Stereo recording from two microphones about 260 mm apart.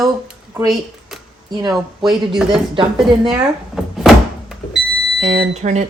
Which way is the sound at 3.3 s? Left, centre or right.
Centre.